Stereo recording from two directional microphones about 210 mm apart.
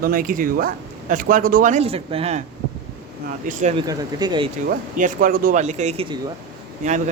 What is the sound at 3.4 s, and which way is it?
Speech, 35° right (ahead or behind).